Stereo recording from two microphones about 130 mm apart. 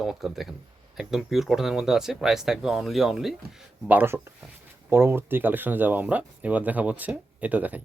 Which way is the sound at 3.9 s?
20° right (ahead or behind).